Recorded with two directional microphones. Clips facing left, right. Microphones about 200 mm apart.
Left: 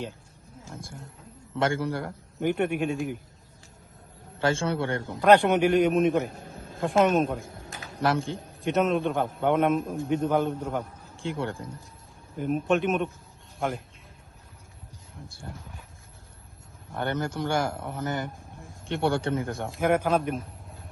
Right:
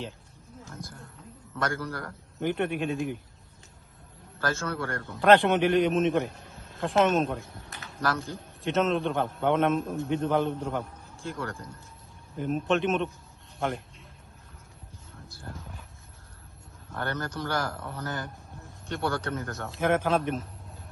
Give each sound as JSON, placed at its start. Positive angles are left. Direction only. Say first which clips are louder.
{"t": 1.5, "sound": "a man's voice", "louder": "left 5 dB", "side_deg": 25}
{"t": 2.4, "sound": "a man's voice", "louder": "left 3 dB", "side_deg": 0}
{"t": 4.4, "sound": "a man's voice", "louder": "left 5 dB", "side_deg": 30}
{"t": 5.2, "sound": "a man's voice", "louder": "left 1 dB", "side_deg": 0}
{"t": 6.3, "sound": "a sound", "louder": "left 6 dB", "side_deg": 50}
{"t": 7.0, "sound": "a man's voice", "louder": "left 2 dB", "side_deg": 0}
{"t": 7.4, "sound": "a sound", "louder": "left 4 dB", "side_deg": 50}
{"t": 7.8, "sound": "a sound", "louder": "left 4 dB", "side_deg": 30}
{"t": 8.7, "sound": "a man's voice", "louder": "left 1 dB", "side_deg": 0}
{"t": 11.3, "sound": "a man's voice", "louder": "left 4 dB", "side_deg": 30}
{"t": 12.4, "sound": "a man's voice", "louder": "left 2 dB", "side_deg": 5}
{"t": 15.5, "sound": "a man's voice", "louder": "right 1 dB", "side_deg": 15}
{"t": 16.9, "sound": "a man's voice", "louder": "left 4 dB", "side_deg": 25}
{"t": 19.9, "sound": "a man's voice", "louder": "left 1 dB", "side_deg": 5}